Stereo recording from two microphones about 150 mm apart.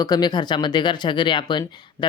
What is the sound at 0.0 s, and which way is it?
Speech, 25° left (ahead or behind).